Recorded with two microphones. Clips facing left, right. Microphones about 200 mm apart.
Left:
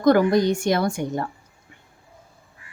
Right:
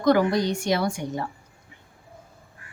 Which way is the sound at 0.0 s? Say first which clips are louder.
Left 3 dB; 50° left (ahead or behind).